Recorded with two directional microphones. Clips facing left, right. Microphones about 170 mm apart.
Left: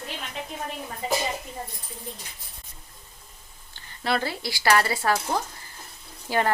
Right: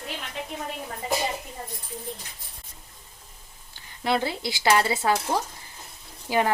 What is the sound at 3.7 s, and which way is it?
Speech, 20° right (ahead or behind).